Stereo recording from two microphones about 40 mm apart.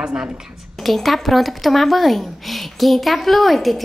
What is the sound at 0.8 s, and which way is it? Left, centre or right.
Speech, centre.